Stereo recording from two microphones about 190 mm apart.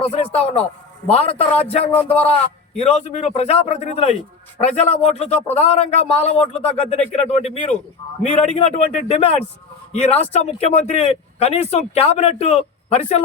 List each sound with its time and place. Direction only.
0.3 s speech: 30° left (ahead or behind)
1.9 s speech: 10° left (ahead or behind)
2.7 s speech: 35° left (ahead or behind)